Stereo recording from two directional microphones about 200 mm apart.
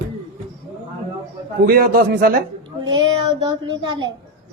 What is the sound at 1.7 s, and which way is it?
Speech, 50° right (ahead or behind).